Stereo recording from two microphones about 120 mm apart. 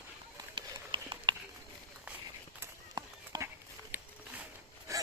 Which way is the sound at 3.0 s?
40° right (ahead or behind).